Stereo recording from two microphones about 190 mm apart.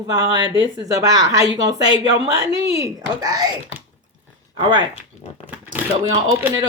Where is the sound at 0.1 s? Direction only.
20° right (ahead or behind).